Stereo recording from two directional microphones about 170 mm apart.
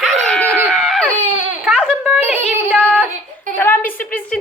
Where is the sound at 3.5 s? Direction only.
15° left (ahead or behind).